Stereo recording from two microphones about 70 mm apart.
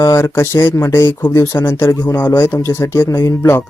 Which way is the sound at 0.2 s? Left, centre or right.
Left.